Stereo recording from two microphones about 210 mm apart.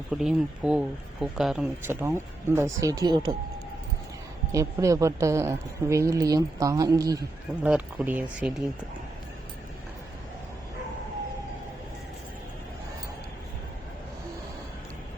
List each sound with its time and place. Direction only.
0.1 s speech: centre (ahead or behind); by 3.3 s 20° right (ahead or behind)
4.5 s speech: 15° right (ahead or behind)